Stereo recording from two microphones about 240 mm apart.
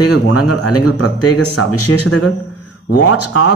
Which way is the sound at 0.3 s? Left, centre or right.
Left.